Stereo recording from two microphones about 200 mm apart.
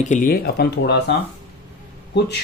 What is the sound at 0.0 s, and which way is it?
Speech, 40° left (ahead or behind).